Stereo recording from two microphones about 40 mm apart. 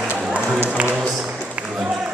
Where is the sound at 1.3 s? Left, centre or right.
Right.